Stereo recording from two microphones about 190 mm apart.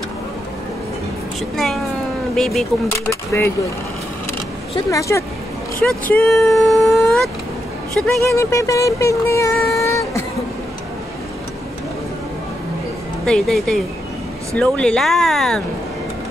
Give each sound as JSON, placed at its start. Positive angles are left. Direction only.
{"t": 1.6, "sound": "speech", "side_deg": 0}
{"t": 3.1, "sound": "speech", "side_deg": 15}
{"t": 4.7, "sound": "speech", "side_deg": 15}
{"t": 8.4, "sound": "speech", "side_deg": 15}
{"t": 13.2, "sound": "speech", "side_deg": 5}